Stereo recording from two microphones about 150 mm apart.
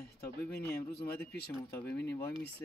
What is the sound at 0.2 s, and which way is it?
Speech, 15° left (ahead or behind).